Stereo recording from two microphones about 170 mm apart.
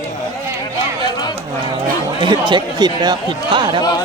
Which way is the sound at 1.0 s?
25° left (ahead or behind).